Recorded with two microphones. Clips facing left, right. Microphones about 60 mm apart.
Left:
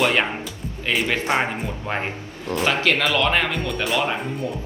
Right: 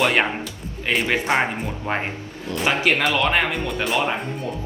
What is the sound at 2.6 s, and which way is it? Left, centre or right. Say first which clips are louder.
Speech: right 1 dB; centre.